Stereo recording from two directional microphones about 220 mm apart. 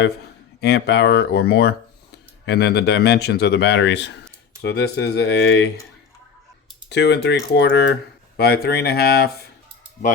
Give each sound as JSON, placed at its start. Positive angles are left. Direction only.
{"t": 0.6, "sound": "speech", "side_deg": 50}
{"t": 6.9, "sound": "speech", "side_deg": 50}